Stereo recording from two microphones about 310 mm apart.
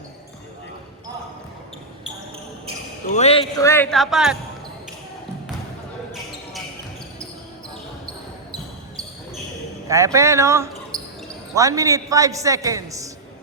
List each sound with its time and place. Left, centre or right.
3.1 s speech: left
3.6 s speech: centre
9.9 s a man's voice: centre